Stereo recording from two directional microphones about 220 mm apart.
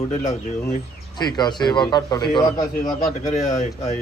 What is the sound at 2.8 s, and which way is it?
Speech, 30° left (ahead or behind).